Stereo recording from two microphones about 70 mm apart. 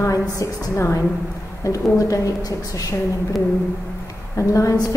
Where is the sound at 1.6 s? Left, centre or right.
Left.